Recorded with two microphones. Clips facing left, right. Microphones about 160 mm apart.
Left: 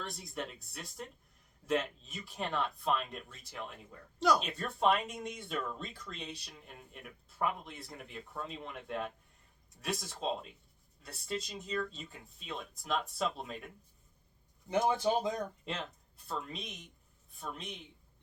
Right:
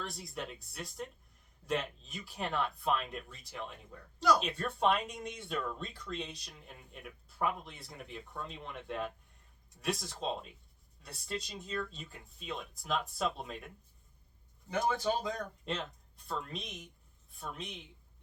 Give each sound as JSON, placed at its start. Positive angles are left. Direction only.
{"t": 0.0, "sound": "speech", "side_deg": 0}
{"t": 14.7, "sound": "speech", "side_deg": 20}
{"t": 16.1, "sound": "speech", "side_deg": 0}